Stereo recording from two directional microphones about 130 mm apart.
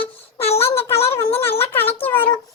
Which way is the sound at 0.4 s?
50° left (ahead or behind).